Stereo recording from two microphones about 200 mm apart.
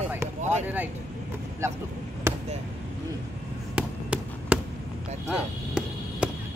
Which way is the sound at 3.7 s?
5° right (ahead or behind).